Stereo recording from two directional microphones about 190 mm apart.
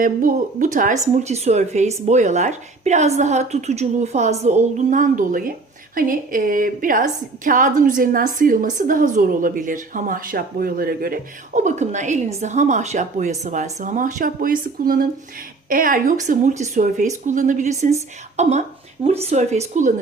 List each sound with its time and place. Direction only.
0.0 s speech: 45° right (ahead or behind)